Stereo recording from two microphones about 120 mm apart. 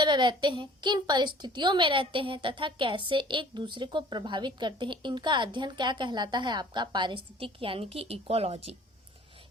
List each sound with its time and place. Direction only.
0.0 s a woman's voice: 40° right (ahead or behind); by 8.7 s 55° right (ahead or behind)